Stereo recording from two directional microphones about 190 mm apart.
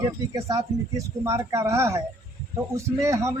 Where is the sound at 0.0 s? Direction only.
20° right (ahead or behind).